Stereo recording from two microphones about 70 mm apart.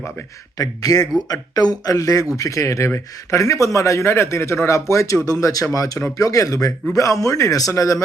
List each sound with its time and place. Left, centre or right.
0.6 s a man's voice: left